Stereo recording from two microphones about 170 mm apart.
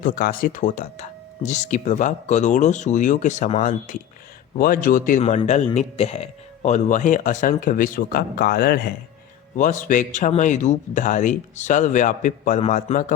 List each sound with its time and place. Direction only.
0.0 s speech: 55° left (ahead or behind)
9.6 s speech: 45° left (ahead or behind)